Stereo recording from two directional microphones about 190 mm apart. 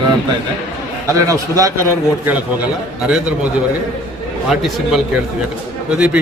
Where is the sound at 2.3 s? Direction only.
5° right (ahead or behind).